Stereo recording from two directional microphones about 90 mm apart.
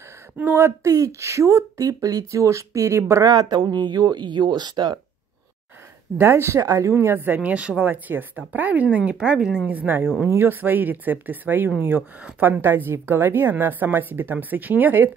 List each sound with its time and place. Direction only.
0.6 s speech: 35° right (ahead or behind)
3.3 s speech: 50° right (ahead or behind)
6.1 s a woman's voice: 25° right (ahead or behind)